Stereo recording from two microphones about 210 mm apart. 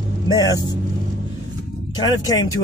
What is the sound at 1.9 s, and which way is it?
Speech, 20° left (ahead or behind).